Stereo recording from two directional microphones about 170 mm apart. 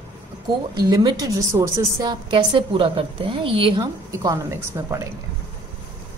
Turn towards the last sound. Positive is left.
turn(degrees=-15)  # may be behind; listen again after turning